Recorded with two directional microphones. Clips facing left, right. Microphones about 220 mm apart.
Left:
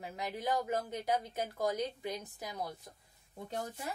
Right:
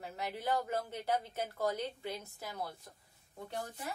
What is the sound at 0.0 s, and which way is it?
A woman's voice, 15° left (ahead or behind).